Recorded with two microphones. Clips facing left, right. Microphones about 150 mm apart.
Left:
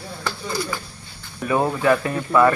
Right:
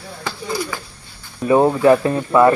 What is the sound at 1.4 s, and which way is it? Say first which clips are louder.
Speech: right 6 dB; 25° right (ahead or behind).